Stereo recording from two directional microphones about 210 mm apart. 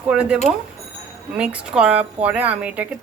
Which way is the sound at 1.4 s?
5° right (ahead or behind).